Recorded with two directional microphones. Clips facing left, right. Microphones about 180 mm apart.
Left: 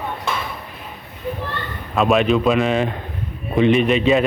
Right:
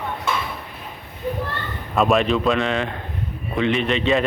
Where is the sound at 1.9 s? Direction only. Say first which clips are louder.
Left 2 dB; centre (ahead or behind).